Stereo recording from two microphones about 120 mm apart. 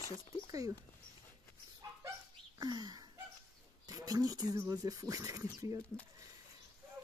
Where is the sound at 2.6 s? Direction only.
35° right (ahead or behind).